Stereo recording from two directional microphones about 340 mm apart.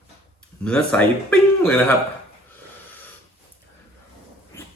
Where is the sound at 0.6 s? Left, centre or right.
Centre.